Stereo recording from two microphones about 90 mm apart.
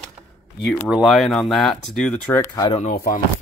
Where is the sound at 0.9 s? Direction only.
Centre (ahead or behind).